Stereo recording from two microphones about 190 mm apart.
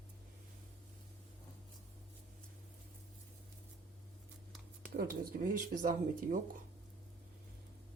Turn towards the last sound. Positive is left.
turn(degrees=-45)  # may be behind; listen again after turning